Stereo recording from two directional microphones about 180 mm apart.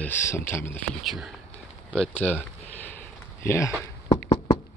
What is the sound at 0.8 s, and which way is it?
Speech, centre (ahead or behind).